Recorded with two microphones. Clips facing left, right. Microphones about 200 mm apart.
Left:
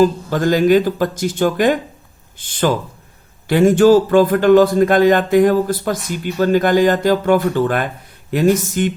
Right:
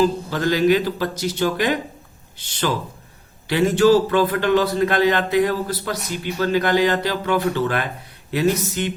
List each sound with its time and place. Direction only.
0.0 s speech: 50° left (ahead or behind)